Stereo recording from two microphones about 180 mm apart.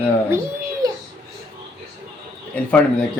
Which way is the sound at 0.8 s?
20° right (ahead or behind).